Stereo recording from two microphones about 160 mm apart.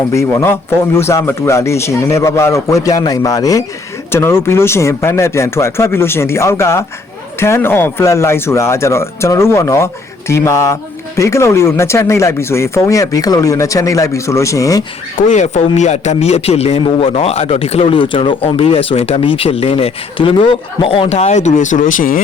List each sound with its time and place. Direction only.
0.1 s speech: 20° left (ahead or behind)
15.3 s a man's voice: 45° left (ahead or behind)